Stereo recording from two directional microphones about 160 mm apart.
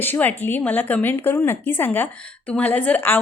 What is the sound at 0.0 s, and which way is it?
Speech, 10° left (ahead or behind).